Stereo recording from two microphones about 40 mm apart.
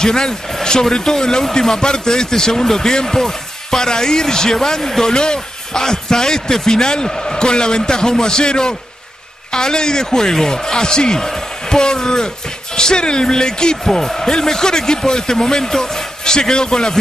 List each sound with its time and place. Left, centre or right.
0.0 s speech: centre